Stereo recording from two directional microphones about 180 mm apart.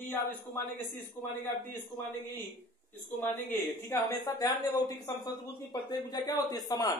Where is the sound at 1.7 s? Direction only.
10° left (ahead or behind).